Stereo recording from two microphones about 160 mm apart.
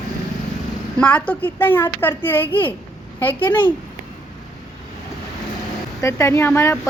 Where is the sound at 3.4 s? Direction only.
30° left (ahead or behind).